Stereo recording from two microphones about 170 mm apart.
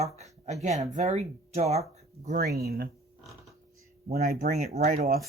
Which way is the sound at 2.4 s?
65° right (ahead or behind).